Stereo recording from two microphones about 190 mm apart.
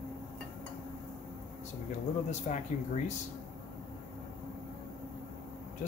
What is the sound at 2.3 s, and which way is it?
Speech, 40° left (ahead or behind).